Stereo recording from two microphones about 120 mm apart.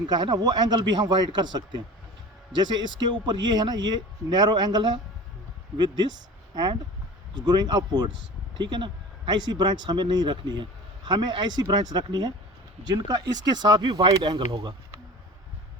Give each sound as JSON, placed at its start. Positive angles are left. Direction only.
{"t": 0.1, "sound": "speech", "side_deg": -35}